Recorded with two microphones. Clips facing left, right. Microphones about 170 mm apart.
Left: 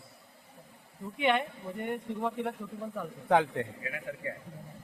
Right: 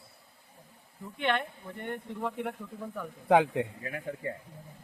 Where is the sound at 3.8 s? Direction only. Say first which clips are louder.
Right 2 dB; 40° right (ahead or behind).